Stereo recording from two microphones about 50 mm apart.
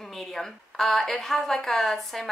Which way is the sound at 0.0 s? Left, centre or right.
Centre.